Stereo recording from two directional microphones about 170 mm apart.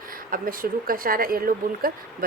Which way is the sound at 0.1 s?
55° right (ahead or behind).